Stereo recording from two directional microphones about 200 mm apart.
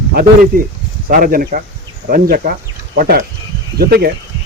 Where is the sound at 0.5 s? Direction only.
45° right (ahead or behind).